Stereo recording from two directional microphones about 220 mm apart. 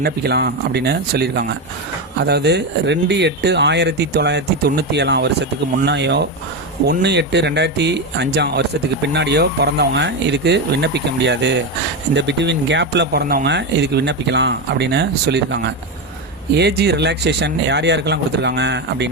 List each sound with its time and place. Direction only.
0.0 s speech: 50° right (ahead or behind)